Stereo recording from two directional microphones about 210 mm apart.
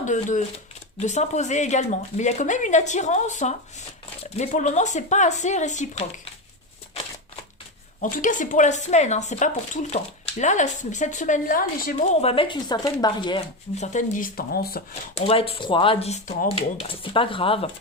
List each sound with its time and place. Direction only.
0.0 s speech: 35° left (ahead or behind)
8.0 s speech: 40° left (ahead or behind)
12.2 s speech: 25° left (ahead or behind); by 14.8 s 45° left (ahead or behind)
15.1 s speech: 25° left (ahead or behind)